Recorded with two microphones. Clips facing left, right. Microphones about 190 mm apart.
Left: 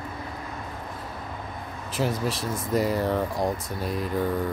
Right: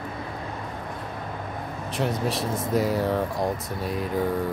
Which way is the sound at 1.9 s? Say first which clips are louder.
Even; centre (ahead or behind).